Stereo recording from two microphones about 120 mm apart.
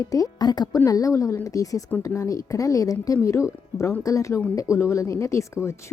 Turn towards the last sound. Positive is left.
turn(degrees=25)  # may be behind; listen again after turning